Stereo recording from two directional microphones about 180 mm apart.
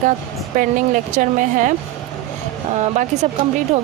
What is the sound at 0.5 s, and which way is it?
Speech, 45° right (ahead or behind).